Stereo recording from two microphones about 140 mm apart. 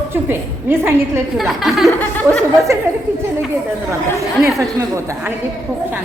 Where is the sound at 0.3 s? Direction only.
15° right (ahead or behind).